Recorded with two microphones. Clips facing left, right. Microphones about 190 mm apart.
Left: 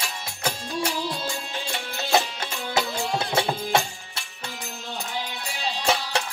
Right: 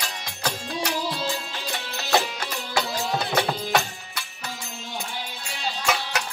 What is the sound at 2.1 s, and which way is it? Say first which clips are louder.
Music: even; 25° left (ahead or behind).